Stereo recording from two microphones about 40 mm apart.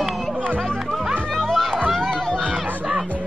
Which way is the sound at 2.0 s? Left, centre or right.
Centre.